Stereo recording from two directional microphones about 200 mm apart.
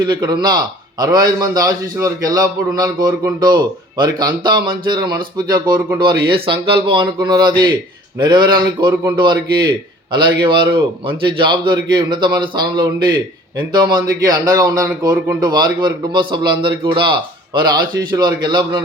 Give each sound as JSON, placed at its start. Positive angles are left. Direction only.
{"t": 0.0, "sound": "a man's voice", "side_deg": -20}